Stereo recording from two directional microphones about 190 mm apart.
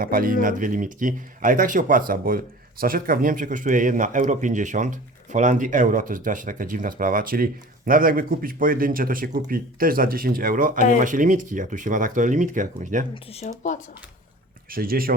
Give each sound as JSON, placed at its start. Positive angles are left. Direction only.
{"t": 0.0, "sound": "speech", "side_deg": -50}
{"t": 13.3, "sound": "speech", "side_deg": 35}
{"t": 14.7, "sound": "speech", "side_deg": -50}